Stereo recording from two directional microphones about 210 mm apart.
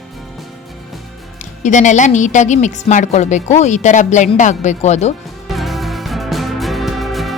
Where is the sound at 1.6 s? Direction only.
35° left (ahead or behind).